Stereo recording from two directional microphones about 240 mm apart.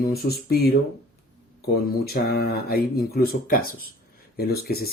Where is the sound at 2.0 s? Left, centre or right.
Left.